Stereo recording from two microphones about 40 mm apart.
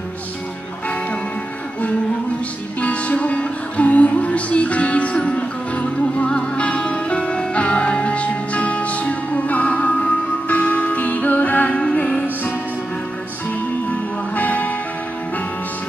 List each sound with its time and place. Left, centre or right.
2.8 s music: left
14.3 s music: left